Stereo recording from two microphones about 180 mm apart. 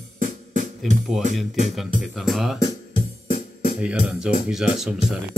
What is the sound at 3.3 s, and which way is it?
Music, 50° left (ahead or behind).